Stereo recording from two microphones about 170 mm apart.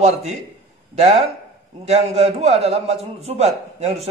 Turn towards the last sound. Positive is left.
turn(degrees=-40)  # may be behind; listen again after turning